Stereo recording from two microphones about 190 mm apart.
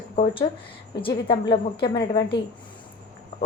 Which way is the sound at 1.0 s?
25° left (ahead or behind).